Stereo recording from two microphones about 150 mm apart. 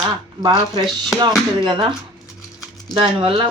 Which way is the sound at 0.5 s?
Centre (ahead or behind).